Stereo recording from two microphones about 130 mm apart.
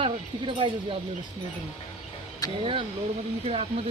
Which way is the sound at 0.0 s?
40° right (ahead or behind).